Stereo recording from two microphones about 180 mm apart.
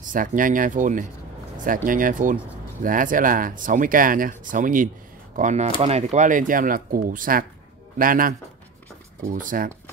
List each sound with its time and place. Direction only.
0.0 s speech: 45° right (ahead or behind)